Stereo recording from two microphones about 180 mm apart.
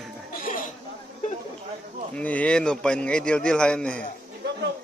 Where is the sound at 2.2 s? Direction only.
10° left (ahead or behind).